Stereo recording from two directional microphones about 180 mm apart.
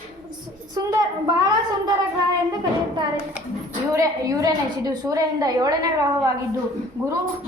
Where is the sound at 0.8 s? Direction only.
20° right (ahead or behind).